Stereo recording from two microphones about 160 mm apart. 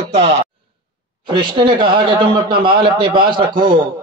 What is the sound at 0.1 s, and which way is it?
A man's voice, 40° right (ahead or behind).